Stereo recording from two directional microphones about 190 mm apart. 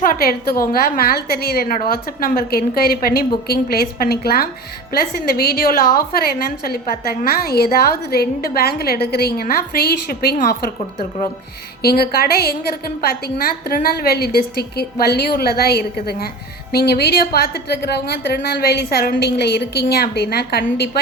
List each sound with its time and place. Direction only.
0.0 s a woman's voice: 50° left (ahead or behind)
11.8 s a woman's voice: 55° left (ahead or behind)